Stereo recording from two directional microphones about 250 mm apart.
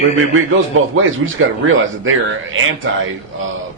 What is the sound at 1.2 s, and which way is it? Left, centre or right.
Speech, right.